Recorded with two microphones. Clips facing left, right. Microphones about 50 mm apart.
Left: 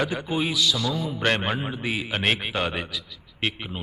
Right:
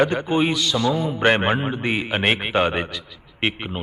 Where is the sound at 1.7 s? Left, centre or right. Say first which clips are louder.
Right 5 dB; centre.